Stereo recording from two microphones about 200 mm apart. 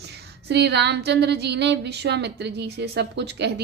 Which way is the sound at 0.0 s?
55° right (ahead or behind).